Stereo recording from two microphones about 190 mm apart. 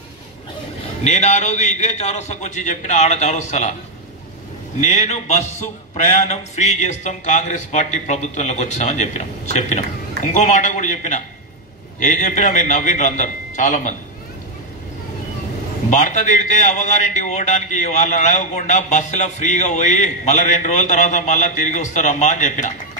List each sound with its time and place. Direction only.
1.0 s a man's voice: 35° left (ahead or behind)
4.7 s a man's voice: 35° left (ahead or behind)
15.9 s a man's voice: 40° left (ahead or behind)